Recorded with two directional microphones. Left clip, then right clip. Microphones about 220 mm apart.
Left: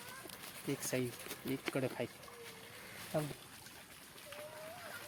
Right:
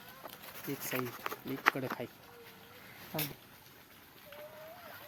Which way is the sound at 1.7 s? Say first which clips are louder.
Even; 20° left (ahead or behind).